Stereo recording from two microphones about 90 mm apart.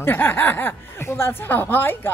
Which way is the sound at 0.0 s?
25° left (ahead or behind).